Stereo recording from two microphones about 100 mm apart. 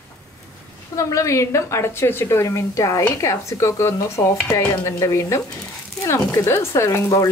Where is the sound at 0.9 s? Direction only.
30° left (ahead or behind).